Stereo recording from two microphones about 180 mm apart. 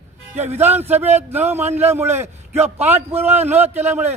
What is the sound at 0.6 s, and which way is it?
A man's voice, 10° right (ahead or behind).